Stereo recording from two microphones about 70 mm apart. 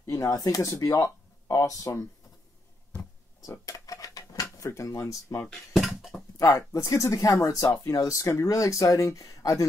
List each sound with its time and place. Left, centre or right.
0.0 s speech: left
3.4 s dishes: left
4.6 s speech: left
5.5 s a sound: centre
6.3 s speech: left